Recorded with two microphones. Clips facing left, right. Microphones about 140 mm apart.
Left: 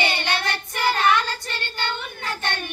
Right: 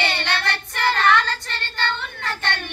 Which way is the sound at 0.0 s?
10° left (ahead or behind).